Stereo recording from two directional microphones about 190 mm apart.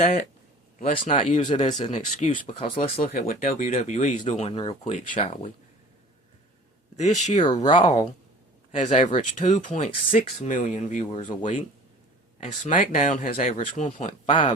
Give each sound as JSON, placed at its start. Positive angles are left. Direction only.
{"t": 0.8, "sound": "speech", "side_deg": 40}
{"t": 3.0, "sound": "speech", "side_deg": 45}
{"t": 6.9, "sound": "speech", "side_deg": 40}